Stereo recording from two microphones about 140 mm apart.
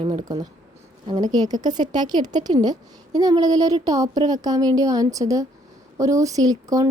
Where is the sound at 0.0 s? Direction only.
50° right (ahead or behind).